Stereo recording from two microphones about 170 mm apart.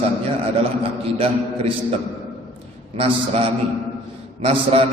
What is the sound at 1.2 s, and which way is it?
Speech, 35° right (ahead or behind).